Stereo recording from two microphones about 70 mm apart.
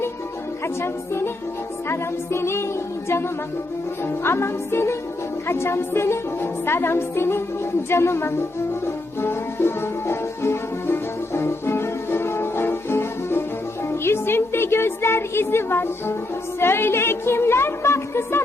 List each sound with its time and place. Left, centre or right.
0.6 s a woman's voice: left
4.0 s a woman's voice: left
9.2 s music: left
16.6 s a woman's voice: left